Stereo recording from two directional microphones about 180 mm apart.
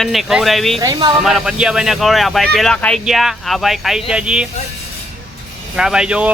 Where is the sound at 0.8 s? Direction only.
25° right (ahead or behind).